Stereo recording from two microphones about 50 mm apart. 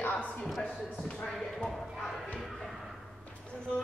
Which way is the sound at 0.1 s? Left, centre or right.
Centre.